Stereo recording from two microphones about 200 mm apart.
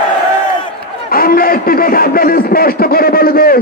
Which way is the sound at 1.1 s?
45° left (ahead or behind).